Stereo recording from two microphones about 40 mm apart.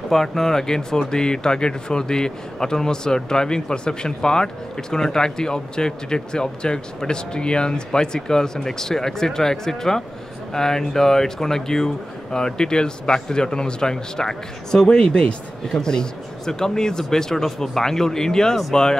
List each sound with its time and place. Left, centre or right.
0.1 s speech: centre